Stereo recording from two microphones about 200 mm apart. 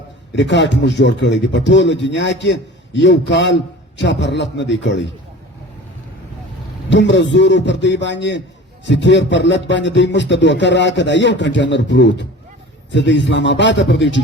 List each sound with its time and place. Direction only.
0.3 s speech: 65° left (ahead or behind)
6.9 s speech: 65° left (ahead or behind)